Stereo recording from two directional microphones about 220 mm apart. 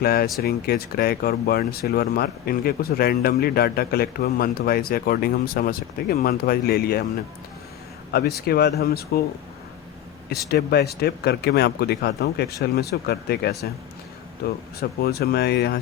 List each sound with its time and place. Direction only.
0.0 s speech: 45° left (ahead or behind)
8.4 s speech: 45° left (ahead or behind)
10.5 s speech: 45° left (ahead or behind)
14.8 s speech: 45° left (ahead or behind)